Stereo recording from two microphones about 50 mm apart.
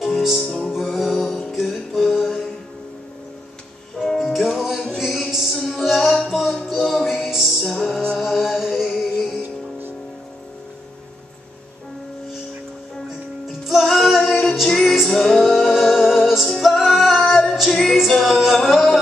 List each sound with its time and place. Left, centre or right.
0.4 s music: centre
4.0 s music: centre
8.2 s chant: centre
8.9 s music: centre
9.4 s music: right
13.5 s music: centre